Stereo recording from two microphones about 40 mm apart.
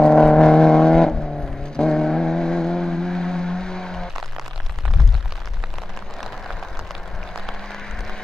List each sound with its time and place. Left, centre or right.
0.0 s vehicle: centre